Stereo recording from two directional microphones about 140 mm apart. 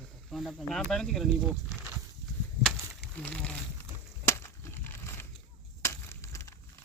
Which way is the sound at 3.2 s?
10° left (ahead or behind).